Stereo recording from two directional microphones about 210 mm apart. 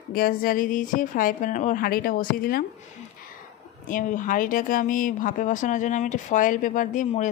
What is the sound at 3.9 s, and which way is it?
Speech, 40° left (ahead or behind).